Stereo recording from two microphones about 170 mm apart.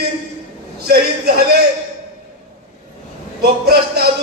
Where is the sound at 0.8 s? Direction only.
65° right (ahead or behind).